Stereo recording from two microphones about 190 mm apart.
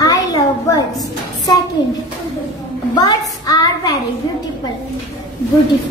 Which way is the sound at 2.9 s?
20° left (ahead or behind).